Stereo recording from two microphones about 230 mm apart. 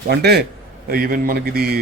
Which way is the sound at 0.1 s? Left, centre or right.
Right.